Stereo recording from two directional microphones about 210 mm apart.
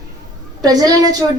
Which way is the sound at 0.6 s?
20° right (ahead or behind).